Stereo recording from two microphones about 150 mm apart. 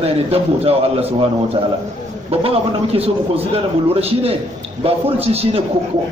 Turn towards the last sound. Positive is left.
turn(degrees=-40)  # may be behind; listen again after turning